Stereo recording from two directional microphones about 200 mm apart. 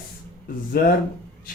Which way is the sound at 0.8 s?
50° left (ahead or behind).